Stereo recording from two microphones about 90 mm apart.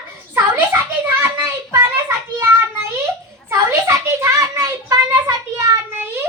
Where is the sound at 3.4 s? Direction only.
30° right (ahead or behind).